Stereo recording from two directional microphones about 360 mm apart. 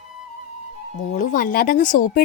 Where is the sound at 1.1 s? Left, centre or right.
Left.